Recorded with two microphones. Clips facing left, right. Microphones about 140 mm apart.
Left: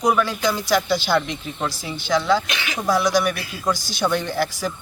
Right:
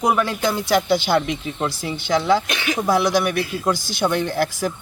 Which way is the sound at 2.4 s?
50° right (ahead or behind).